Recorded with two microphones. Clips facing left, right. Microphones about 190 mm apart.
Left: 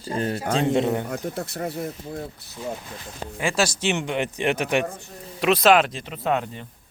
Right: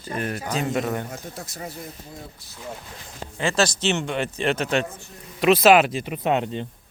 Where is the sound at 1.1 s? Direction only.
60° left (ahead or behind).